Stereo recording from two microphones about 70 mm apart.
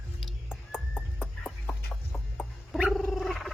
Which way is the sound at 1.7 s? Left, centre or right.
Centre.